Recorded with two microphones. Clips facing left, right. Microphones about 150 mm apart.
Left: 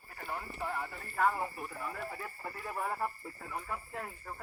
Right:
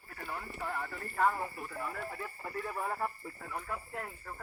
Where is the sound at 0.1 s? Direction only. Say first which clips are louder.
Left 1 dB; 20° left (ahead or behind).